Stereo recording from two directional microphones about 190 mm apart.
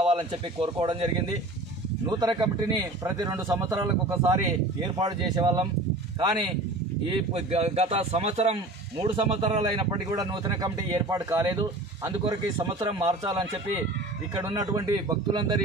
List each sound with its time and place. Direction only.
0.1 s speech: 30° right (ahead or behind)
14.5 s speech: 25° right (ahead or behind)